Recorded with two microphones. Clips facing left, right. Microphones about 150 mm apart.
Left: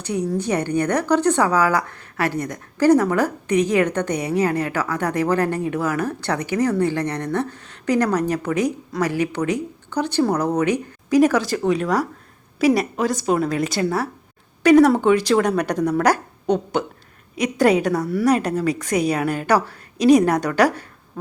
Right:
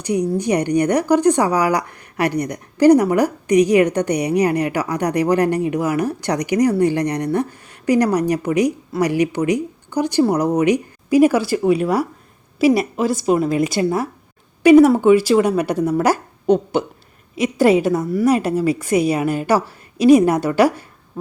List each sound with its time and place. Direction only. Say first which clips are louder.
0.0 s speech: right 4 dB; 10° right (ahead or behind)
12.6 s a woman's voice: right 2 dB; 40° left (ahead or behind)
13.0 s speech: right 3 dB; 5° right (ahead or behind)